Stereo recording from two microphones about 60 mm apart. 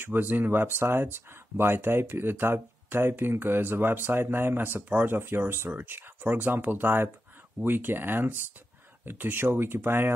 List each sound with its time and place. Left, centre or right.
0.0 s speech: right